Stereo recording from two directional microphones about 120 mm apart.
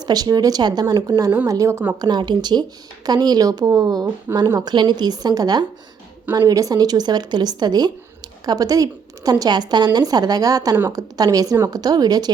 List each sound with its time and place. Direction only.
0.0 s a woman's voice: 35° right (ahead or behind)